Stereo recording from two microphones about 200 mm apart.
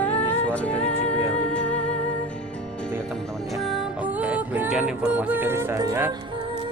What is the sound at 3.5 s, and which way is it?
Music, centre (ahead or behind).